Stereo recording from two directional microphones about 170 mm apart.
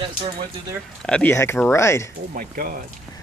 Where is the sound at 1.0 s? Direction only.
10° left (ahead or behind).